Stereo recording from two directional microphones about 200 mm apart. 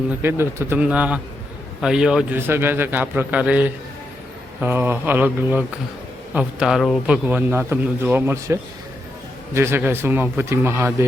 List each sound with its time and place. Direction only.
0.2 s a man's voice: 10° right (ahead or behind)
9.6 s a man's voice: 10° right (ahead or behind)